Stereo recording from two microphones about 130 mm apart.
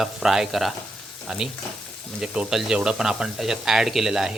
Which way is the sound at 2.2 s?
5° right (ahead or behind).